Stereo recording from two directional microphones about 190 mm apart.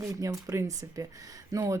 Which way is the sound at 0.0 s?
20° right (ahead or behind).